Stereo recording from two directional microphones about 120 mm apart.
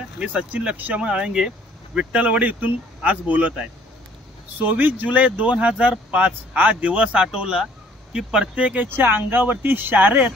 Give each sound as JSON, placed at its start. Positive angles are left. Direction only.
{"t": 0.2, "sound": "speech", "side_deg": -10}